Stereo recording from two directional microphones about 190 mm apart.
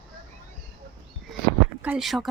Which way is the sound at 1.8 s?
5° right (ahead or behind).